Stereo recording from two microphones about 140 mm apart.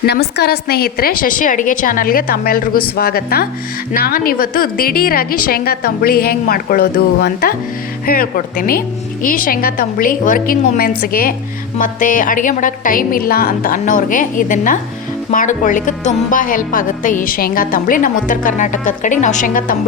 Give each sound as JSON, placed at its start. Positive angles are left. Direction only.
{"t": 0.7, "sound": "a woman's voice", "side_deg": 90}
{"t": 9.2, "sound": "a woman's voice", "side_deg": 75}
{"t": 11.8, "sound": "speech", "side_deg": 70}